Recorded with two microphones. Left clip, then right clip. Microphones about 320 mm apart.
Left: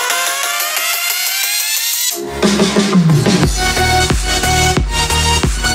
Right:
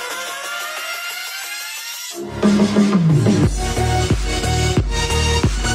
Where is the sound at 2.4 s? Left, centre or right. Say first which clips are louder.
Left 3 dB; left.